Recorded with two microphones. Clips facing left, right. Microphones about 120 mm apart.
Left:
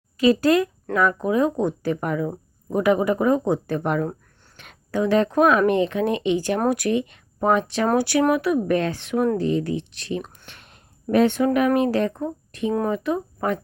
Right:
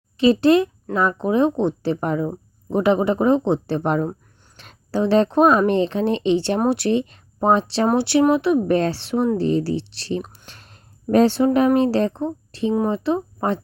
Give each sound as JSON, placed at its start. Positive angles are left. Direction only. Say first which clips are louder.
{"t": 0.2, "sound": "speech", "louder": "right 3 dB", "side_deg": -25}